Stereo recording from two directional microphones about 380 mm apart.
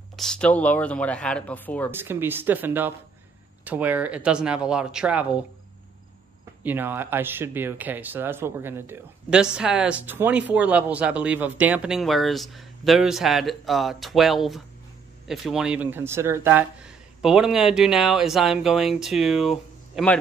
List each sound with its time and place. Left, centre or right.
0.1 s speech: centre
6.6 s speech: centre